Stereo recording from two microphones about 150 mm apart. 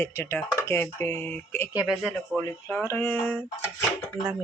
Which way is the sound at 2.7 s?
15° left (ahead or behind).